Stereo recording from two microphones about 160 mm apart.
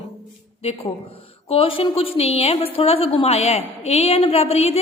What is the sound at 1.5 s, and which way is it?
A woman's voice, 35° left (ahead or behind).